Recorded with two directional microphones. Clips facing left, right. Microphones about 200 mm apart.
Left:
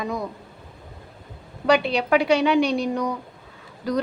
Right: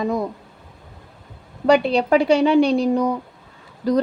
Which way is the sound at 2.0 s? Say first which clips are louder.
Right 2 dB; 30° right (ahead or behind).